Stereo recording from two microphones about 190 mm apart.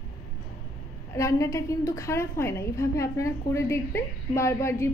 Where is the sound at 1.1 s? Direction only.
15° left (ahead or behind).